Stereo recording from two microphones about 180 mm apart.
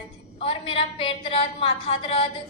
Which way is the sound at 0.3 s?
30° left (ahead or behind).